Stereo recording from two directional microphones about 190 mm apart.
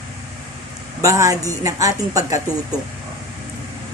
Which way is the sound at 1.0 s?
15° right (ahead or behind).